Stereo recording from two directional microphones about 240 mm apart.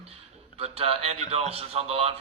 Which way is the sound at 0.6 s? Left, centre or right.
Right.